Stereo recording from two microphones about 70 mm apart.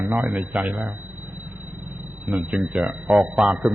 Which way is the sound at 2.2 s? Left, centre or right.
Centre.